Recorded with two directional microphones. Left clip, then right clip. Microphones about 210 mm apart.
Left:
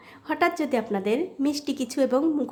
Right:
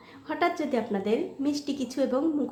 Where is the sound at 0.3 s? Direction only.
25° left (ahead or behind).